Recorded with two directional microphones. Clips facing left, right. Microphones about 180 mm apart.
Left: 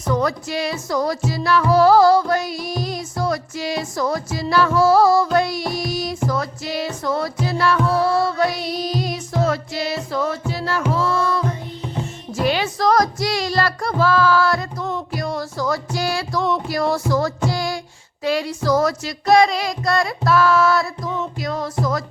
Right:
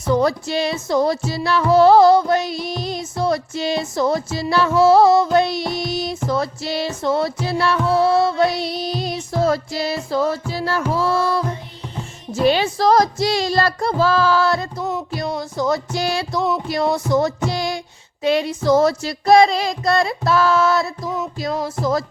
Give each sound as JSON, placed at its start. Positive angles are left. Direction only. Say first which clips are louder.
{"t": 0.1, "sound": "music", "louder": "right 3 dB", "side_deg": -30}